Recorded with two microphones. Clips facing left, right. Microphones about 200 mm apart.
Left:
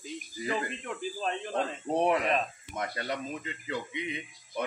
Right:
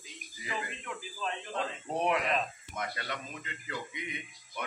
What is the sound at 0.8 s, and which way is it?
Speech, 45° left (ahead or behind).